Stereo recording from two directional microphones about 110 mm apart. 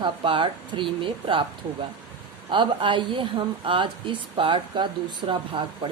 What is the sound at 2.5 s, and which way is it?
Speech, 45° right (ahead or behind).